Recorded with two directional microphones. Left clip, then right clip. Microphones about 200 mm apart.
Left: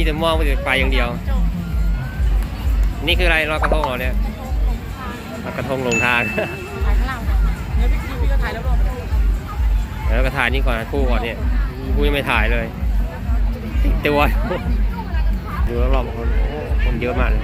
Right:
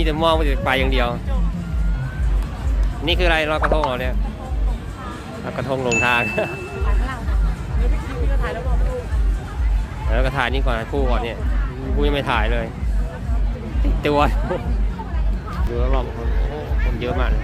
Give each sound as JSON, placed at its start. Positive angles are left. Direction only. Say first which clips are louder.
{"t": 0.0, "sound": "speech", "louder": "right 1 dB", "side_deg": -15}
{"t": 3.0, "sound": "speech", "louder": "left 1 dB", "side_deg": -10}
{"t": 5.5, "sound": "speech", "louder": "even", "side_deg": -5}
{"t": 10.1, "sound": "speech", "louder": "left 2 dB", "side_deg": -5}
{"t": 14.0, "sound": "speech", "louder": "left 1 dB", "side_deg": -5}
{"t": 15.8, "sound": "speech", "louder": "left 2 dB", "side_deg": 0}